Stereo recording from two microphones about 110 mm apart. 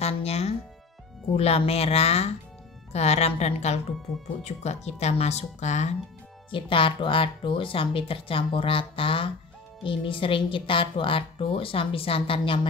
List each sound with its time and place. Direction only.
0.0 s music: 70° left (ahead or behind)
1.3 s speech: 70° left (ahead or behind); by 5.9 s 90° left
6.5 s a woman's voice: 50° left (ahead or behind)